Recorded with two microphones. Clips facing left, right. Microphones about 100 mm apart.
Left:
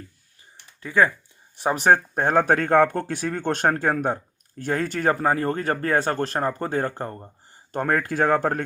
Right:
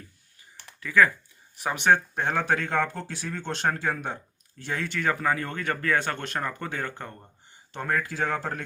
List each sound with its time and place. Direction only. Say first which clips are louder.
0.8 s speech: left 1 dB; 30° left (ahead or behind); by 8.6 s 50° left (ahead or behind)